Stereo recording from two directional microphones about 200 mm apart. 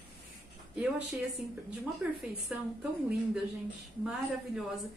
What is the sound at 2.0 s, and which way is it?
Speech, 5° right (ahead or behind).